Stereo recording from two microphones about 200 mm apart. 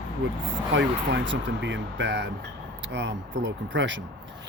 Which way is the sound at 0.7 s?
65° right (ahead or behind).